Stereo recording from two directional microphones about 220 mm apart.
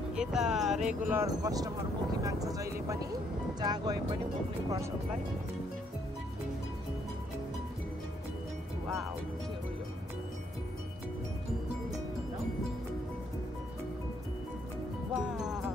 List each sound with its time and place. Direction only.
0.1 s speech: 5° right (ahead or behind)
15.1 s music: 5° right (ahead or behind)